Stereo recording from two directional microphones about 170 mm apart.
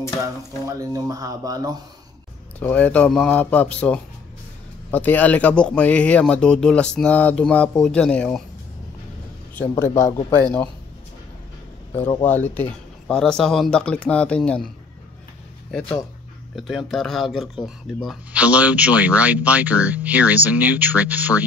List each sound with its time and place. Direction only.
0.7 s speech: 20° right (ahead or behind)
2.6 s speech: 10° left (ahead or behind)
9.6 s speech: 15° left (ahead or behind)
12.3 s speech: 10° left (ahead or behind)
15.7 s speech: 5° left (ahead or behind); by 21.5 s 10° right (ahead or behind)